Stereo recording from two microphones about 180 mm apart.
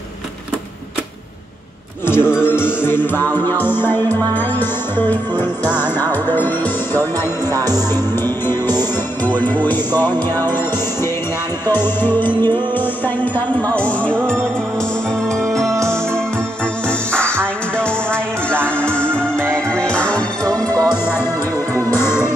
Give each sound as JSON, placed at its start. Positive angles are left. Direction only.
{"t": 2.0, "sound": "music", "side_deg": 15}
{"t": 7.5, "sound": "music", "side_deg": -20}
{"t": 7.9, "sound": "music", "side_deg": 10}
{"t": 11.8, "sound": "music", "side_deg": 10}
{"t": 15.2, "sound": "music", "side_deg": 0}
{"t": 15.7, "sound": "music", "side_deg": -15}
{"t": 17.1, "sound": "music", "side_deg": 5}
{"t": 18.5, "sound": "music", "side_deg": -10}
{"t": 19.5, "sound": "music", "side_deg": 5}
{"t": 20.4, "sound": "music", "side_deg": -20}
{"t": 21.9, "sound": "music", "side_deg": 15}